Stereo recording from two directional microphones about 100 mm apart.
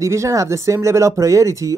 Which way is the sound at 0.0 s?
30° right (ahead or behind).